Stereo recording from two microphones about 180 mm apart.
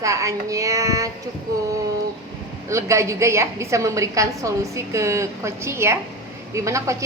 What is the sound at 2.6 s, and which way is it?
A woman's voice, 15° right (ahead or behind).